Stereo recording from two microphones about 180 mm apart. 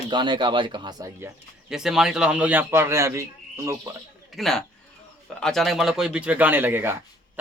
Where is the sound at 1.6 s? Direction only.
5° right (ahead or behind).